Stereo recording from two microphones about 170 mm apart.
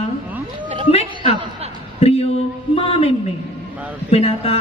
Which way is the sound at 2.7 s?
35° left (ahead or behind).